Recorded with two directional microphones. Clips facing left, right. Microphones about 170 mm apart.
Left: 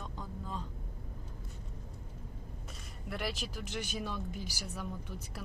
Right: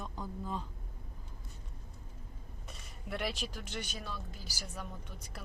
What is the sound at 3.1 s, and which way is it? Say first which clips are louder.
Speech: right 1 dB; centre (ahead or behind).